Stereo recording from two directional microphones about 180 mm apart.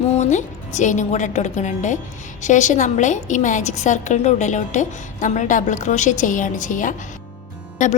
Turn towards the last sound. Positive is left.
turn(degrees=45)  # may be behind; listen again after turning